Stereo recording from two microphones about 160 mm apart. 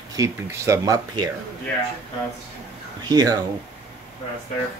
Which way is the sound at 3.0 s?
25° right (ahead or behind).